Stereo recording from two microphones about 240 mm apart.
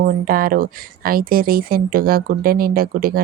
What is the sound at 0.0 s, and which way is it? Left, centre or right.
Speech, right.